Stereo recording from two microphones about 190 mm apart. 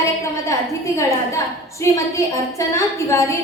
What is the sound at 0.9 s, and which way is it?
A woman's voice, 15° left (ahead or behind).